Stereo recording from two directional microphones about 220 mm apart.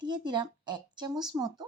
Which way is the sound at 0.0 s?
20° right (ahead or behind).